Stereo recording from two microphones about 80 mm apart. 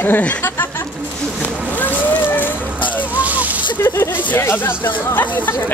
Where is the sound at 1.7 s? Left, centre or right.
Left.